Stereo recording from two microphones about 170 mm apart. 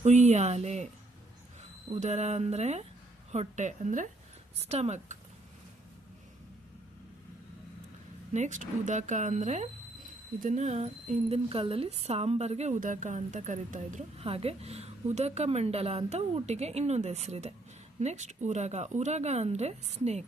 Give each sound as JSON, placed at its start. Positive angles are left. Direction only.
{"t": 0.0, "sound": "speech", "side_deg": -45}
{"t": 1.9, "sound": "speech", "side_deg": -40}
{"t": 8.3, "sound": "speech", "side_deg": -45}